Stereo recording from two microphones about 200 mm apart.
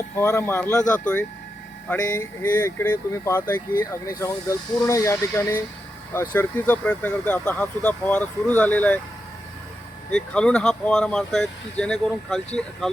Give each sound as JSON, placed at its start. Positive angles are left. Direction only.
{"t": 0.2, "sound": "speech", "side_deg": 15}
{"t": 1.9, "sound": "speech", "side_deg": 10}
{"t": 10.1, "sound": "speech", "side_deg": 5}